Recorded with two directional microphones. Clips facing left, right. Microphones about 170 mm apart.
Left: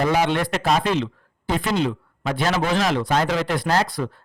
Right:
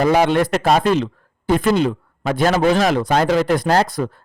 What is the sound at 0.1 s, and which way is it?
Speech, 50° right (ahead or behind).